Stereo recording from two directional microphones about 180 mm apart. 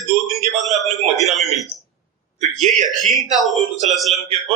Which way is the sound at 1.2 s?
Centre (ahead or behind).